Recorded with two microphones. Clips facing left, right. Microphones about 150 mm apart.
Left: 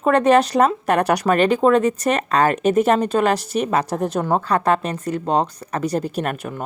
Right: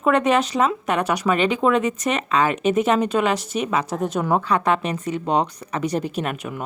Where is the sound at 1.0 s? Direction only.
65° left (ahead or behind).